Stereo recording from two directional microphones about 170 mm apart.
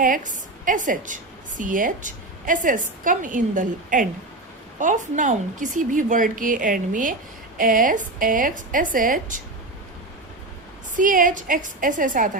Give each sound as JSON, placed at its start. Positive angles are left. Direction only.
{"t": 0.0, "sound": "a woman's voice", "side_deg": -50}
{"t": 10.9, "sound": "a woman's voice", "side_deg": -50}